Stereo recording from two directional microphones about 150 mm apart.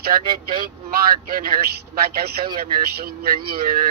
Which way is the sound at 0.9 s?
75° right (ahead or behind).